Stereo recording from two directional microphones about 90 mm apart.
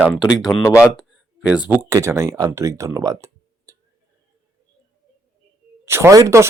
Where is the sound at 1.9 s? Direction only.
35° right (ahead or behind).